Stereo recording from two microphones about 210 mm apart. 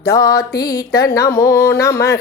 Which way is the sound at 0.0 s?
15° left (ahead or behind).